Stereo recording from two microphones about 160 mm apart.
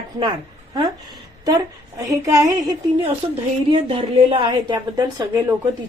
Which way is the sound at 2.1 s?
20° right (ahead or behind).